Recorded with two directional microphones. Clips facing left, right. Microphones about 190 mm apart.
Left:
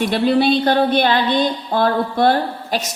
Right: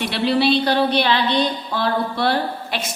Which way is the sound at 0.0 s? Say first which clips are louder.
Left 3 dB; 45° left (ahead or behind).